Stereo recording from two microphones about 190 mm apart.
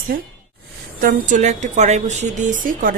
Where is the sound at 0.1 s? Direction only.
50° right (ahead or behind).